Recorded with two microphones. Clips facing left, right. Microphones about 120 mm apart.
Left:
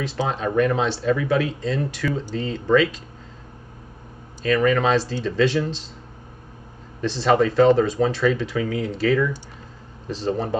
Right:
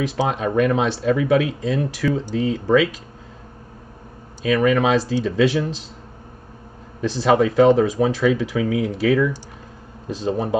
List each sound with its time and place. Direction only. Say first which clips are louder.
0.0 s speech: right 3 dB; 15° right (ahead or behind)
4.5 s speech: right 2 dB; 15° right (ahead or behind)
7.0 s speech: right 2 dB; 15° right (ahead or behind)